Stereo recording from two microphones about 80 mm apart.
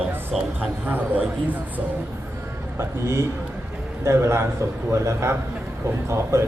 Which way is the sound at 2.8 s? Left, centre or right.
Right.